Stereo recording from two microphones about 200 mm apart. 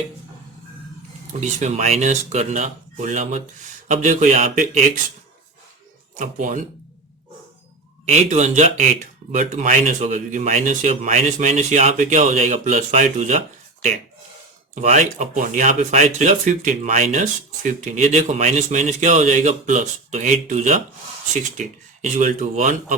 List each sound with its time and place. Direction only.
1.4 s speech: 35° right (ahead or behind)
6.1 s speech: 40° right (ahead or behind)
8.0 s speech: 35° right (ahead or behind)
14.8 s speech: 35° right (ahead or behind)